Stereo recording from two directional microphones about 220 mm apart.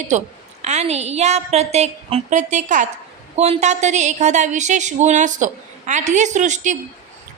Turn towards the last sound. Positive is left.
turn(degrees=-35)  # may be behind; listen again after turning